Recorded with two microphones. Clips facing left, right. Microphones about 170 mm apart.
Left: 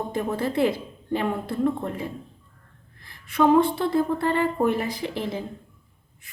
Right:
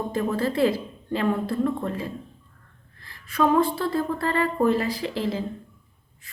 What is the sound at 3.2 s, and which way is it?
A woman's voice, 20° left (ahead or behind).